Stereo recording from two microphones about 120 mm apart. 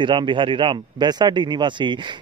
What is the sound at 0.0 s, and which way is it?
Speech, 40° right (ahead or behind).